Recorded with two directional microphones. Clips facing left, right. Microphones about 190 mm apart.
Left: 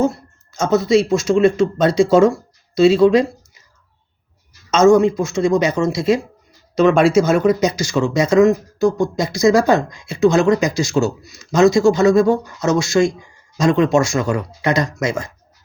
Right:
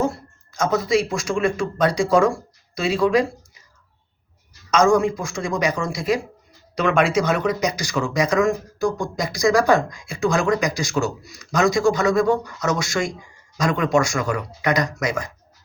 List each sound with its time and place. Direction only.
0.5 s speech: 25° left (ahead or behind)
4.7 s speech: 25° left (ahead or behind)